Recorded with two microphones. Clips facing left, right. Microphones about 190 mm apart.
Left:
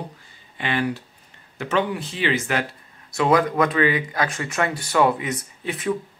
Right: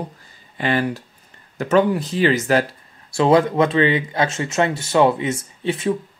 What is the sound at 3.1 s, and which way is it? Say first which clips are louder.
Speech: right 4 dB; 30° right (ahead or behind).